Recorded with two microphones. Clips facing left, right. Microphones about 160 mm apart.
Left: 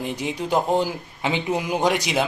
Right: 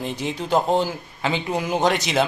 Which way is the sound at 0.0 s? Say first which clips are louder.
Even; 10° left (ahead or behind).